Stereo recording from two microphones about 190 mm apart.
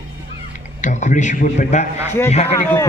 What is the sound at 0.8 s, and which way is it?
A man's voice, 40° left (ahead or behind).